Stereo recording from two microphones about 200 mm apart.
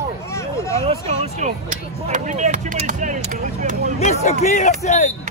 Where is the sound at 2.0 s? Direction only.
40° right (ahead or behind).